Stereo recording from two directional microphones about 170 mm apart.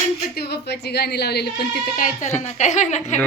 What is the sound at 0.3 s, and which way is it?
A woman's voice, 70° left (ahead or behind).